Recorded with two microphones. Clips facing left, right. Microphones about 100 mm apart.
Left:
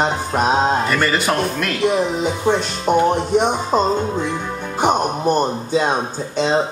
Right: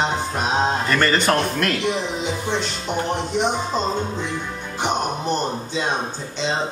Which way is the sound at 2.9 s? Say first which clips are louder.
Left 10 dB; 50° left (ahead or behind).